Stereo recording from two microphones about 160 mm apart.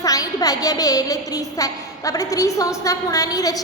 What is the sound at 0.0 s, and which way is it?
A woman's voice, 20° left (ahead or behind).